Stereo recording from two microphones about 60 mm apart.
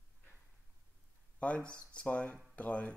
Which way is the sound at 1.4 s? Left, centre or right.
Left.